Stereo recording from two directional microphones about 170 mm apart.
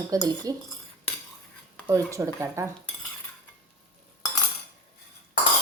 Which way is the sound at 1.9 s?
20° right (ahead or behind).